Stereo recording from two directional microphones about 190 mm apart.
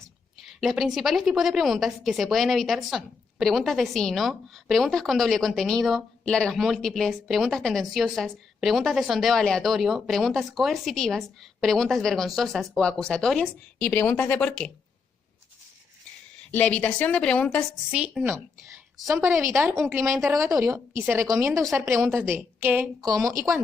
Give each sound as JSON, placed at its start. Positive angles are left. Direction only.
{"t": 0.3, "sound": "a woman's voice", "side_deg": 0}
{"t": 16.5, "sound": "a woman's voice", "side_deg": 10}
{"t": 17.9, "sound": "a woman's voice", "side_deg": -5}